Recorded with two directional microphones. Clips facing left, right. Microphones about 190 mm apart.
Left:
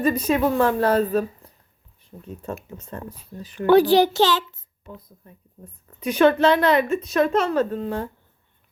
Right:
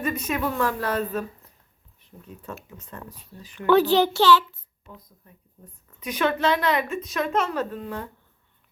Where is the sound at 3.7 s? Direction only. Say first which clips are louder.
Left 3 dB; 15° left (ahead or behind).